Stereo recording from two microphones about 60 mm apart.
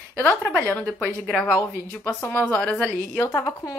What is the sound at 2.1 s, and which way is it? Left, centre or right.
A woman's voice, left.